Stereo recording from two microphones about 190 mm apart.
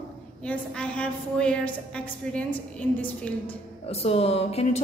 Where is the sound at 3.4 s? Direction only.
30° left (ahead or behind).